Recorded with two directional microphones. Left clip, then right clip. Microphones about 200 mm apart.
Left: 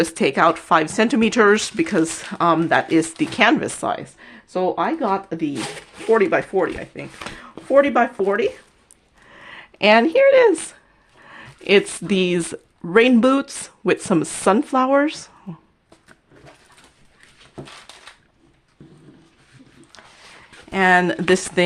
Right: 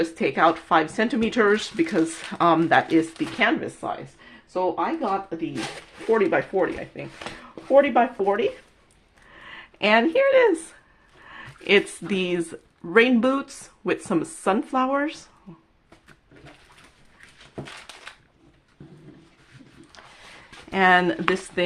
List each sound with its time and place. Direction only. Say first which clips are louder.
0.0 s speech: left 4 dB; 40° left (ahead or behind); by 3.0 s 15° left (ahead or behind)
3.2 s speech: left 6 dB; 35° left (ahead or behind)
3.8 s speech: left 7 dB; 55° left (ahead or behind)
6.1 s speech: left 4 dB; 25° left (ahead or behind)
19.9 s a sound: left 2 dB; 10° left (ahead or behind)